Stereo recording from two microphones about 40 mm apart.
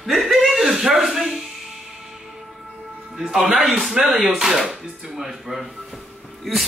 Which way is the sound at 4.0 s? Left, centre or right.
Centre.